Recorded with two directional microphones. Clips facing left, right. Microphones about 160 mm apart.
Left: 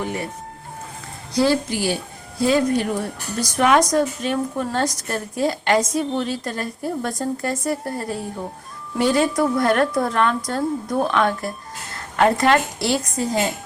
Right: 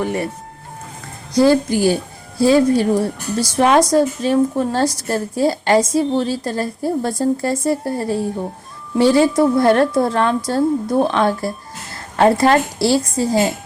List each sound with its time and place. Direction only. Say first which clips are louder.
1.3 s a woman's voice: right 6 dB; 45° right (ahead or behind)
2.4 s a woman's voice: right 5 dB; 30° right (ahead or behind)